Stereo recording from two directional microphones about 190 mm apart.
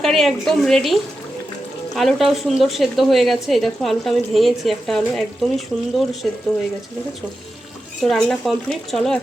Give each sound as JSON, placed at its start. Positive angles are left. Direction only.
{"t": 0.0, "sound": "speech", "side_deg": 0}
{"t": 2.0, "sound": "speech", "side_deg": 0}
{"t": 8.0, "sound": "speech", "side_deg": 0}